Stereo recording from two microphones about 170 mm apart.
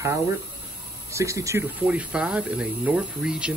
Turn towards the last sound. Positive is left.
turn(degrees=-5)  # may be behind; listen again after turning